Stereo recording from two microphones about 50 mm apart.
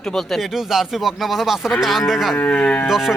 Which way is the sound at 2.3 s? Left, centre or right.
Left.